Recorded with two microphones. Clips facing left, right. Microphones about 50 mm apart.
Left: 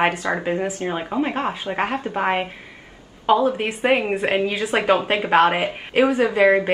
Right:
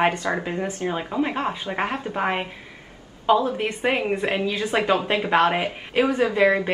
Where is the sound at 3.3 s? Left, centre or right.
Left.